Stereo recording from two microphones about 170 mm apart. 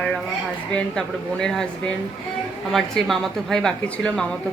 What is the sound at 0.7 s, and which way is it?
Speech, 5° left (ahead or behind).